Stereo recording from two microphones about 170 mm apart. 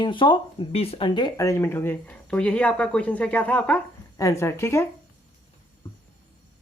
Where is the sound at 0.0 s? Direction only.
30° left (ahead or behind).